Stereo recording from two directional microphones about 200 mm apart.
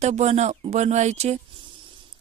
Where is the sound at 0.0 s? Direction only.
35° right (ahead or behind).